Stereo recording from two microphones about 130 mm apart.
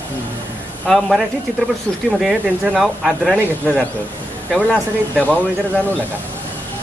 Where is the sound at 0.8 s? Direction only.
Centre (ahead or behind).